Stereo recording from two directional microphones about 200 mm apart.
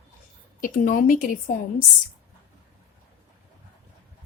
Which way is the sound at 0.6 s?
40° left (ahead or behind).